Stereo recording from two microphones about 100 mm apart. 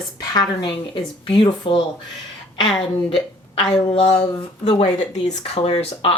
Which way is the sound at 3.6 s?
55° left (ahead or behind).